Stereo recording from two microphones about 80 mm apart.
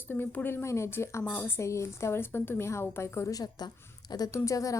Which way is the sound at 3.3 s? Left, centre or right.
Left.